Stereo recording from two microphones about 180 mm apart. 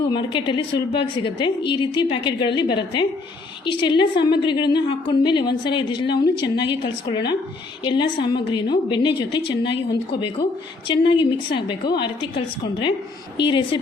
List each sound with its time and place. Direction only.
0.1 s a woman's voice: 25° left (ahead or behind)
13.4 s a woman's voice: 25° left (ahead or behind)